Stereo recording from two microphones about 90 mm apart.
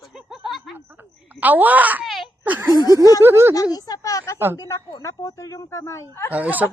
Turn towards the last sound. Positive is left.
turn(degrees=-20)  # may be behind; listen again after turning